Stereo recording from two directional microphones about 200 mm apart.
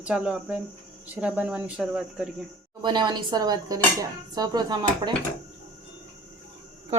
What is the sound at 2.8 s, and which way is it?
Speech, 20° right (ahead or behind).